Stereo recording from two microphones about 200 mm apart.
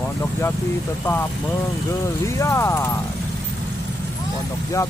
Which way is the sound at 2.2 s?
15° left (ahead or behind).